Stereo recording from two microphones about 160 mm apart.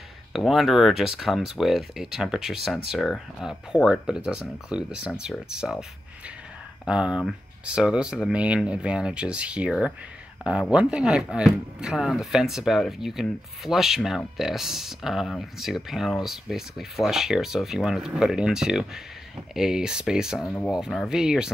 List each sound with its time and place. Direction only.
0.3 s speech: centre (ahead or behind)
6.9 s speech: 5° right (ahead or behind)
20.4 s speech: 10° left (ahead or behind)
20.7 s speech: centre (ahead or behind)